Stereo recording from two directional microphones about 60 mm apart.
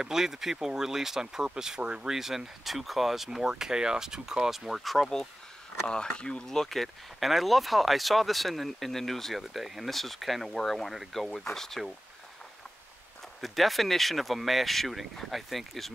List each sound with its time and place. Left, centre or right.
0.0 s speech: centre
13.4 s speech: centre